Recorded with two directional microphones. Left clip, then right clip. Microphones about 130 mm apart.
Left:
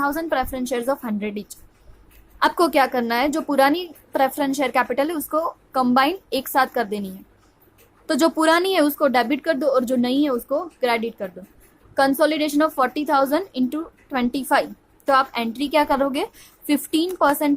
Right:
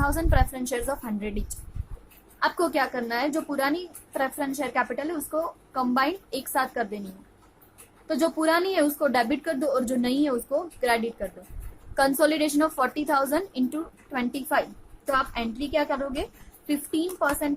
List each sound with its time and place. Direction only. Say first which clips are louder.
0.0 s a woman's voice: left 4 dB; 30° left (ahead or behind)
2.4 s a woman's voice: left 7 dB; 50° left (ahead or behind)
8.0 s a woman's voice: left 6 dB; 60° left (ahead or behind)
9.0 s a woman's voice: left 5 dB; 40° left (ahead or behind)
11.9 s a woman's voice: left 4 dB; 30° left (ahead or behind)
15.0 s a woman's voice: left 7 dB; 60° left (ahead or behind)